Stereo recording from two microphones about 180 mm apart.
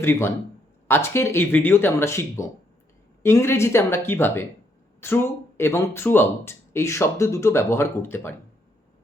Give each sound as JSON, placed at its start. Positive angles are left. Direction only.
{"t": 0.0, "sound": "speech", "side_deg": 15}